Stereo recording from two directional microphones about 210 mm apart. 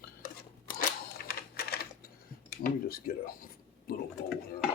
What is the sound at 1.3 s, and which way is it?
Typing, 45° left (ahead or behind).